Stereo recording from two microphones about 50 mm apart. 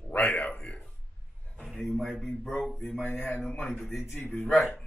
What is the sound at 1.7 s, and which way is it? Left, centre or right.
Speech, centre.